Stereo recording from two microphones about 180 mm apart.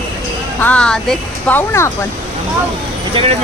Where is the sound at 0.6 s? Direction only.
5° left (ahead or behind).